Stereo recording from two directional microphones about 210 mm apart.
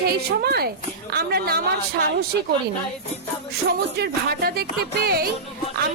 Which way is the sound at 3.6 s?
50° right (ahead or behind).